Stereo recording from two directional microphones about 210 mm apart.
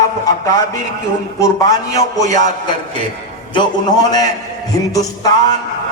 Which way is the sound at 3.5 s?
20° left (ahead or behind).